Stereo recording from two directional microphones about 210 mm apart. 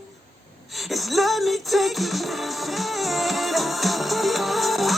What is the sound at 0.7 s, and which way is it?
Music, centre (ahead or behind).